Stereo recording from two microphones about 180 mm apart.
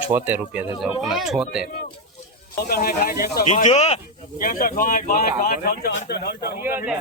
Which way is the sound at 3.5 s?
40° left (ahead or behind).